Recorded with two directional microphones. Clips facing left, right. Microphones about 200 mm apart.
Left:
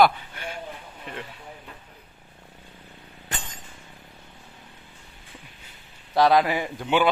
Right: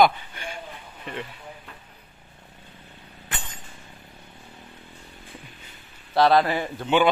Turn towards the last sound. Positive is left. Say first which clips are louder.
# right 1 dB
turn(degrees=10)  # may be behind; listen again after turning